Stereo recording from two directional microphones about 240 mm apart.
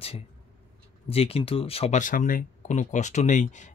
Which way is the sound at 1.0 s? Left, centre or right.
Left.